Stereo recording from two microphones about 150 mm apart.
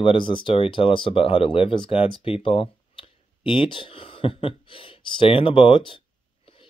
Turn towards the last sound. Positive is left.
turn(degrees=35)  # may be behind; listen again after turning